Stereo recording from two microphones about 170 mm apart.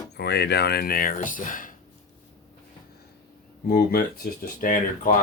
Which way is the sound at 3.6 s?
60° left (ahead or behind).